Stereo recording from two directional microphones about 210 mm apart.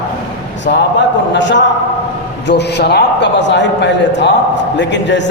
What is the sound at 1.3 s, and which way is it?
A man's voice, 60° left (ahead or behind).